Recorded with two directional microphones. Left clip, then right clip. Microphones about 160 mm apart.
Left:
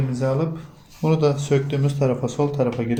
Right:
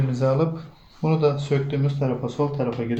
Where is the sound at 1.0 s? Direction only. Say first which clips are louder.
Left 1 dB; 30° left (ahead or behind).